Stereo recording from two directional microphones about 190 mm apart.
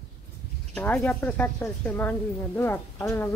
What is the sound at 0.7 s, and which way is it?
Speech, 5° left (ahead or behind).